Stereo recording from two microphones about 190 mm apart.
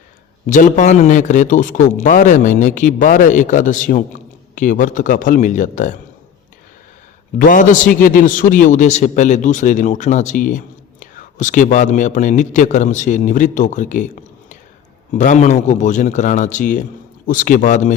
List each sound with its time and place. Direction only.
0.4 s a man's voice: 40° left (ahead or behind)
7.3 s a man's voice: 45° left (ahead or behind)
15.1 s a man's voice: 40° left (ahead or behind)